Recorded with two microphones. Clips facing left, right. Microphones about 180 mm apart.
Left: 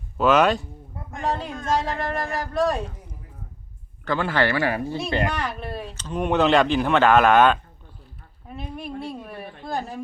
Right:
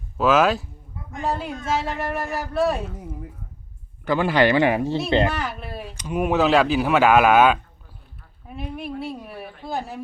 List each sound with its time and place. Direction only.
0.2 s a woman's voice: centre (ahead or behind)
4.0 s speech: 15° right (ahead or behind)
5.3 s a woman's voice: 5° right (ahead or behind)